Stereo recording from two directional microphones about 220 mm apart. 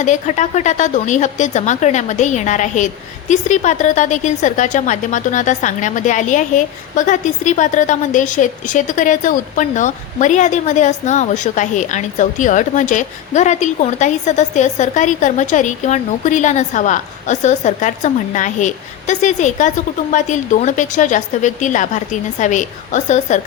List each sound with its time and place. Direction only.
0.0 s a woman's voice: 35° left (ahead or behind)